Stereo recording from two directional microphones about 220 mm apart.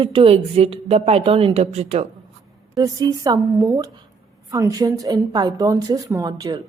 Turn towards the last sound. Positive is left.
turn(degrees=-15)  # may be behind; listen again after turning